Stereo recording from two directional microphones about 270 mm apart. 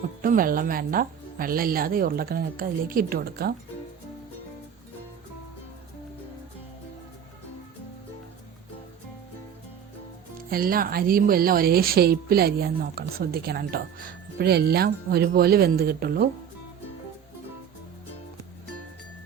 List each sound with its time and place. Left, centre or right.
0.2 s speech: right
10.5 s speech: right